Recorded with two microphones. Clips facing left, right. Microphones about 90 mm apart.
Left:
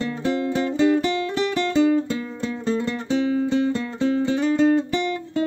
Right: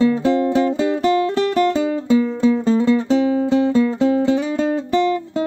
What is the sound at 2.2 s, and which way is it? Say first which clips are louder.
Music: right 10 dB; centre (ahead or behind).